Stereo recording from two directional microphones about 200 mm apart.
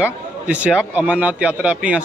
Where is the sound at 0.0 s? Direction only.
5° right (ahead or behind).